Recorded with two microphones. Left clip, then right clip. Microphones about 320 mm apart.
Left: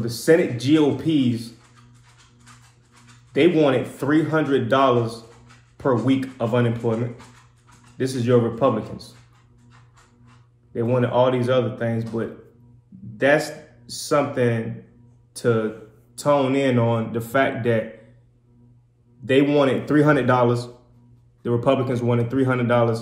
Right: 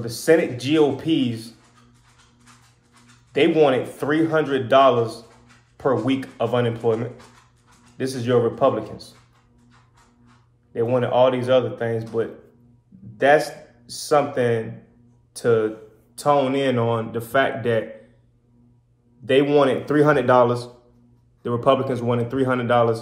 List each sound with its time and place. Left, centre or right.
0.0 s a man's voice: centre
3.3 s a man's voice: centre
8.0 s a man's voice: centre
10.7 s a man's voice: centre
19.2 s speech: centre